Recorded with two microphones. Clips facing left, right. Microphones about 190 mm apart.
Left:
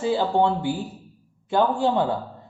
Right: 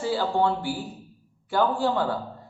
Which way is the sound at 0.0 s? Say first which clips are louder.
Left 3 dB; 20° left (ahead or behind).